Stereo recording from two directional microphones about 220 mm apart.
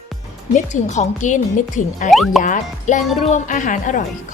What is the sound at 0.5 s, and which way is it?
Speech, 35° left (ahead or behind).